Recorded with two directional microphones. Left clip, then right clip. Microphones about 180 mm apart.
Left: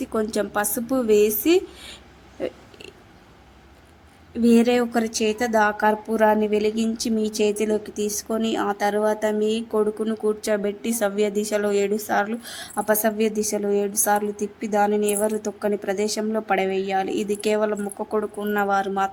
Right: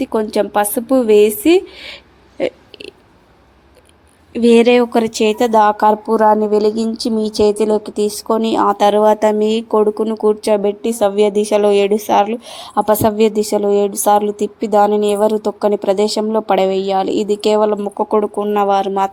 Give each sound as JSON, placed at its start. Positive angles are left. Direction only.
{"t": 0.0, "sound": "a woman's voice", "side_deg": -20}
{"t": 2.4, "sound": "a sound", "side_deg": -25}
{"t": 4.4, "sound": "a woman's voice", "side_deg": -25}
{"t": 6.1, "sound": "a woman's voice", "side_deg": -15}
{"t": 10.0, "sound": "a woman's voice", "side_deg": -20}